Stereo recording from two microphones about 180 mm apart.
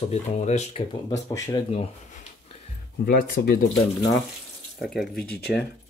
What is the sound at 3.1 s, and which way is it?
Speech, 55° left (ahead or behind).